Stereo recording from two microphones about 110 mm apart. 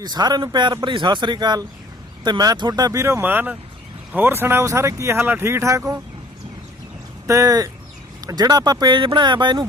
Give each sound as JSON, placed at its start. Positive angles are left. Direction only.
{"t": 0.0, "sound": "speech", "side_deg": -40}
{"t": 7.3, "sound": "speech", "side_deg": -30}